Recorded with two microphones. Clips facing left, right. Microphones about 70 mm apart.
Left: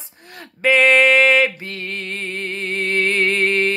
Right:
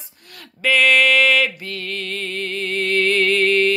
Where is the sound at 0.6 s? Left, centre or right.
Left.